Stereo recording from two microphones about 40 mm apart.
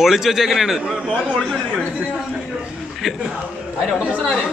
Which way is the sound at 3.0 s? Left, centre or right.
Centre.